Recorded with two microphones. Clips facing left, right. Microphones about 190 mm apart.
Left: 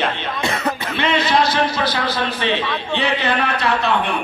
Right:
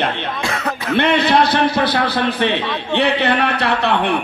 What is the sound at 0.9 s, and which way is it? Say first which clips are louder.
A man's voice: right 5 dB; 60° right (ahead or behind).